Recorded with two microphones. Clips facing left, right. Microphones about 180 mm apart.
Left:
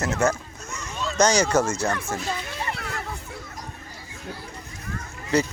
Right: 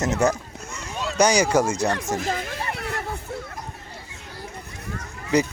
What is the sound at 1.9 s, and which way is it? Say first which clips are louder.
Speech: right 3 dB; 40° right (ahead or behind).